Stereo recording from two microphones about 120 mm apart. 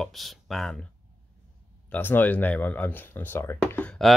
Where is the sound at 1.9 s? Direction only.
15° left (ahead or behind).